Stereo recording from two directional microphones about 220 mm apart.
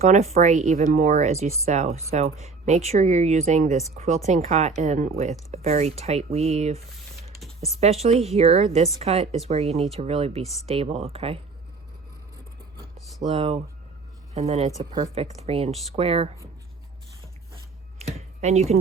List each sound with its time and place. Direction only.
0.0 s speech: 30° right (ahead or behind)
8.0 s speech: 30° right (ahead or behind)
13.2 s speech: 30° right (ahead or behind)
18.0 s a sound: 30° right (ahead or behind)